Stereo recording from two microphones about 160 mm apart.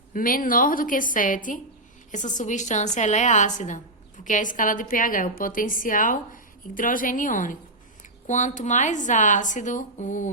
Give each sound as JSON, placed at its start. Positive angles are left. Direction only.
{"t": 0.1, "sound": "a woman's voice", "side_deg": 60}